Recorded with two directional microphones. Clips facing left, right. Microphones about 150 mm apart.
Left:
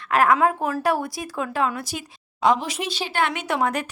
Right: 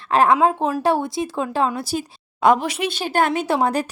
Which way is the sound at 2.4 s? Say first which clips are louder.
Right 4 dB; 55° right (ahead or behind).